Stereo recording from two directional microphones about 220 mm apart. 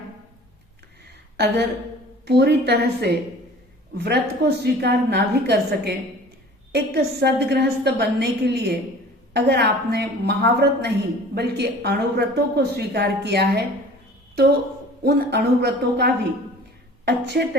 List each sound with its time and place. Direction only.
1.4 s speech: 50° right (ahead or behind)
15.0 s speech: 45° right (ahead or behind)